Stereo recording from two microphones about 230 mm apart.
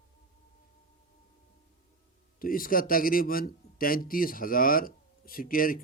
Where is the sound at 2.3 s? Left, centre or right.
Left.